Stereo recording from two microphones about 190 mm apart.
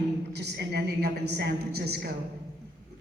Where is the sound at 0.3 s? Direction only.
60° right (ahead or behind).